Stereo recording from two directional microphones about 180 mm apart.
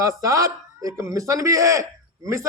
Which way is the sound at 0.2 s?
20° right (ahead or behind).